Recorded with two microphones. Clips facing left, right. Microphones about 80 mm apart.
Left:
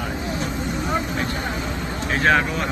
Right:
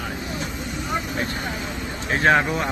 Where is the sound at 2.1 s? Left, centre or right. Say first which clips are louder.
Right 1 dB; right.